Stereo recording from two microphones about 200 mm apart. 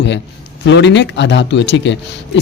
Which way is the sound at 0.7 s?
60° left (ahead or behind).